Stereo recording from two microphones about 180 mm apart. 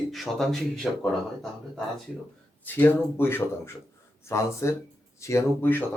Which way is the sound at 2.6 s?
10° left (ahead or behind).